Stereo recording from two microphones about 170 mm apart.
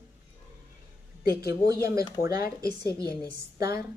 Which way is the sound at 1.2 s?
65° left (ahead or behind).